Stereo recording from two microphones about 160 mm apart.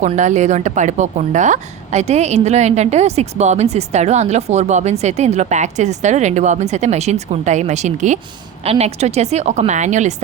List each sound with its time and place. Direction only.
0.0 s a woman's voice: 50° right (ahead or behind)